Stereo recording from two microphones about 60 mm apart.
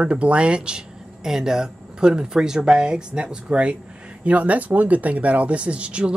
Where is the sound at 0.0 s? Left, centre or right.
Centre.